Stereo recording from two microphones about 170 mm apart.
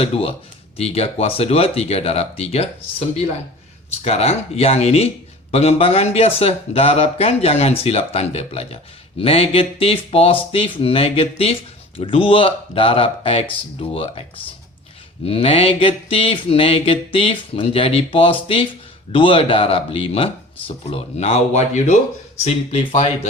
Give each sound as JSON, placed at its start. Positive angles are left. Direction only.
{"t": 0.0, "sound": "speech", "side_deg": 35}
{"t": 4.0, "sound": "speech", "side_deg": 35}
{"t": 22.4, "sound": "speech", "side_deg": 35}